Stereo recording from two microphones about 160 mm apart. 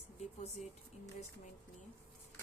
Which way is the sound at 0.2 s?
45° left (ahead or behind).